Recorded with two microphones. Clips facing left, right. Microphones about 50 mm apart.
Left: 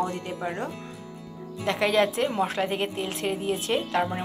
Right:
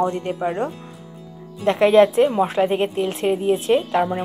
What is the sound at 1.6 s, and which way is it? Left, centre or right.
A woman's voice, right.